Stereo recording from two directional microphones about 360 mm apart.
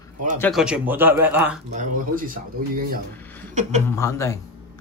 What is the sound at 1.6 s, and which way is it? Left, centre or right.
Speech, right.